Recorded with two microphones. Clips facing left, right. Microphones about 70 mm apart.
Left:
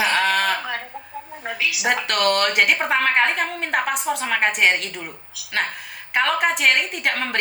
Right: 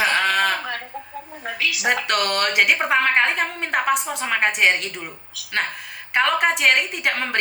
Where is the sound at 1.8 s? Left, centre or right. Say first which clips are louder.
Left 1 dB; centre.